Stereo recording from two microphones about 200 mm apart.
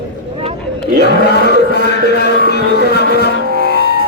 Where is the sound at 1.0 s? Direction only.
55° left (ahead or behind).